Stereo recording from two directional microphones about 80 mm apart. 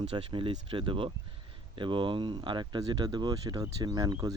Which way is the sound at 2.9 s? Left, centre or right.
Right.